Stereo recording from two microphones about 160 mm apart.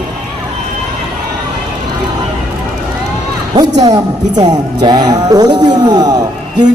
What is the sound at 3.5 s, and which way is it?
A man's voice, 25° right (ahead or behind).